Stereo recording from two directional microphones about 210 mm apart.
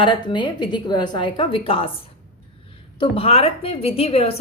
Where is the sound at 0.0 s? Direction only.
20° left (ahead or behind).